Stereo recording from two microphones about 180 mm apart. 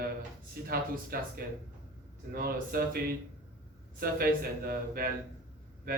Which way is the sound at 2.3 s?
55° right (ahead or behind).